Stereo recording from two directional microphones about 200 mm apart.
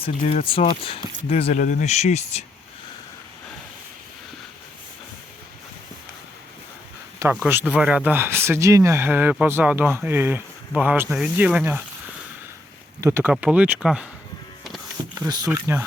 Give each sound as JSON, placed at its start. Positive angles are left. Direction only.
{"t": 0.0, "sound": "speech", "side_deg": 30}
{"t": 7.2, "sound": "speech", "side_deg": -10}
{"t": 13.0, "sound": "speech", "side_deg": -10}
{"t": 14.6, "sound": "a sound", "side_deg": 0}
{"t": 15.2, "sound": "speech", "side_deg": -20}